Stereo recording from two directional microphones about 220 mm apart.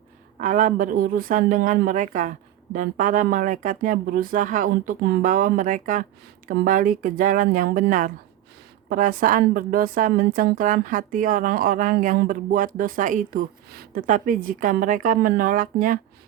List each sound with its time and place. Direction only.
0.3 s a woman's voice: 35° right (ahead or behind)